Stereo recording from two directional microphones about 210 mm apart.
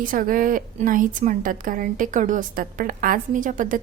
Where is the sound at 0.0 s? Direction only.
40° right (ahead or behind).